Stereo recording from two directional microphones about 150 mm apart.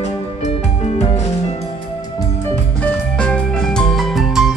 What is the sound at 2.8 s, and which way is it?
Music, 10° left (ahead or behind).